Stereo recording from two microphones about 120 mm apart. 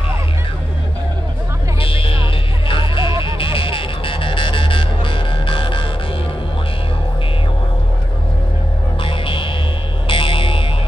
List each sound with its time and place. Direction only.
1.8 s music: 50° left (ahead or behind)
9.0 s music: 45° left (ahead or behind)